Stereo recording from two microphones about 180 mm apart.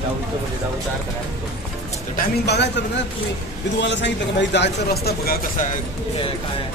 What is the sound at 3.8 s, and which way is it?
Speech, 80° left.